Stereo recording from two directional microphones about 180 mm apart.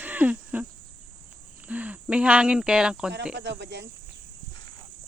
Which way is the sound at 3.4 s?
70° right (ahead or behind).